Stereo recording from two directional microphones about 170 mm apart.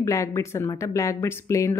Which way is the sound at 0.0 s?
15° left (ahead or behind).